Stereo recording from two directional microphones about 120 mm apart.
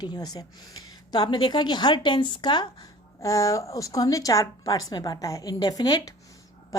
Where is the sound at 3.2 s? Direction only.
25° left (ahead or behind).